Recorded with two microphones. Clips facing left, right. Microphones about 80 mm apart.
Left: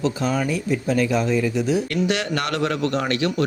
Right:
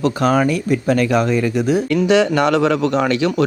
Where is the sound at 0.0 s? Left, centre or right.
Right.